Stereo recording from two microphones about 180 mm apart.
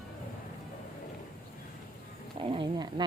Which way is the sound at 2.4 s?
30° right (ahead or behind).